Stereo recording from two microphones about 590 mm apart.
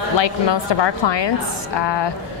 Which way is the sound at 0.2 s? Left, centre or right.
Left.